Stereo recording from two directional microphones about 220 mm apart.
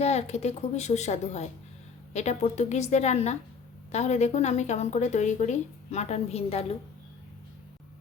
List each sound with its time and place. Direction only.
0.0 s a woman's voice: 30° left (ahead or behind)